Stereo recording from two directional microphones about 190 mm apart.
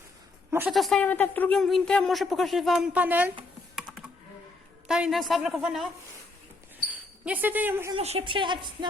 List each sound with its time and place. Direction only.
0.7 s a woman's voice: centre (ahead or behind)
3.8 s computer keyboard: 5° right (ahead or behind)
4.9 s a woman's voice: 5° right (ahead or behind)
7.3 s speech: 10° right (ahead or behind)
7.9 s a woman's voice: 30° right (ahead or behind)